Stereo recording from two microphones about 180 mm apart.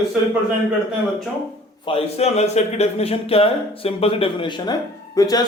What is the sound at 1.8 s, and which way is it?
A woman's voice, 30° left (ahead or behind).